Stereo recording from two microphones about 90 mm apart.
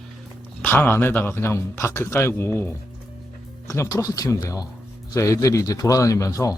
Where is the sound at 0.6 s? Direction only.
25° left (ahead or behind).